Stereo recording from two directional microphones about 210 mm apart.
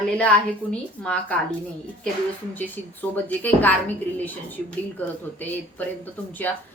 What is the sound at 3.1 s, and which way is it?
Speech, 10° left (ahead or behind).